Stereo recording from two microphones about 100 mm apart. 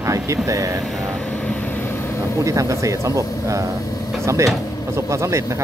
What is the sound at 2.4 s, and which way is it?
Speech, 35° right (ahead or behind).